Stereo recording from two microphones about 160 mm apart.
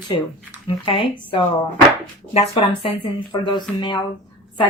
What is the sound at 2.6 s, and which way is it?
Speech, 30° left (ahead or behind).